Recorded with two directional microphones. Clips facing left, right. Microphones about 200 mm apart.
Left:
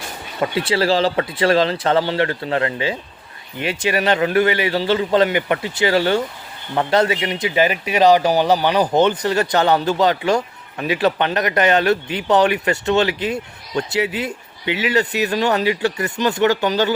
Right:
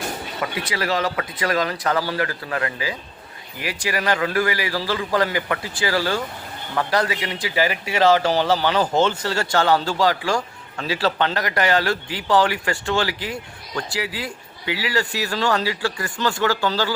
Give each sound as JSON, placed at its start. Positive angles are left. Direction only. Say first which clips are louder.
{"t": 0.5, "sound": "a man's voice", "louder": "left 7 dB", "side_deg": 30}